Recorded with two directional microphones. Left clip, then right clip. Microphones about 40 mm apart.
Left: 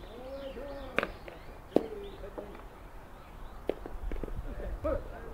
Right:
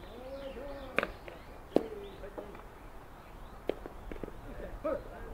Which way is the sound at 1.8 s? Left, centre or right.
Right.